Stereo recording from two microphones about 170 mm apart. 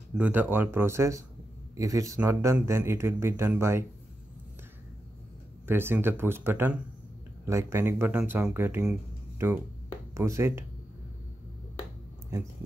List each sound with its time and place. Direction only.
0.1 s speech: 10° right (ahead or behind)
5.7 s speech: 15° right (ahead or behind)
10.1 s speech: 15° right (ahead or behind)